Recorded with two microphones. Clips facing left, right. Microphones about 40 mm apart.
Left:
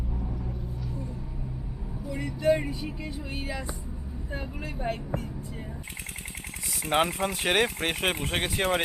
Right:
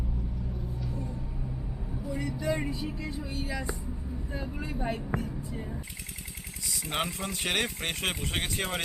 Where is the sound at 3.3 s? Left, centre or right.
Centre.